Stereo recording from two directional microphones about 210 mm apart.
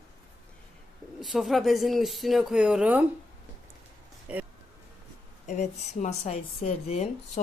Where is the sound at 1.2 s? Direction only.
Centre (ahead or behind).